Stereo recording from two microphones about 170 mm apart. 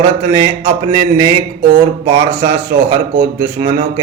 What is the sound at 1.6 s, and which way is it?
Speech, 65° right (ahead or behind).